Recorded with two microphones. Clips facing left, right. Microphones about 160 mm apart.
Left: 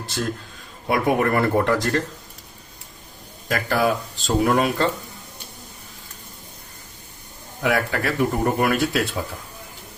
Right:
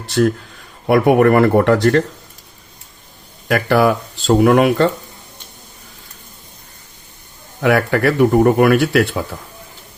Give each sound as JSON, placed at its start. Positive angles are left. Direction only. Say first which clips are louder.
{"t": 0.1, "sound": "speech", "louder": "right 13 dB", "side_deg": -65}
{"t": 3.5, "sound": "speech", "louder": "right 7 dB", "side_deg": -70}
{"t": 7.6, "sound": "speech", "louder": "right 8 dB", "side_deg": -70}